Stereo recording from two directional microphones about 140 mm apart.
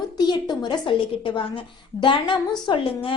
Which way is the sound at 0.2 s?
30° left (ahead or behind).